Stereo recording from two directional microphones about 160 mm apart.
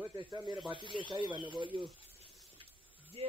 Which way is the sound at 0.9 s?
30° right (ahead or behind).